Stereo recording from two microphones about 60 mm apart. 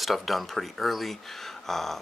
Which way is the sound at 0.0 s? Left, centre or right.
Centre.